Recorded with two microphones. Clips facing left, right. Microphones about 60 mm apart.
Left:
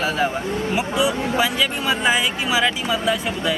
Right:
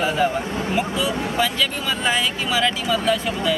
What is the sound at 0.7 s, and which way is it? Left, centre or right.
Speech, centre.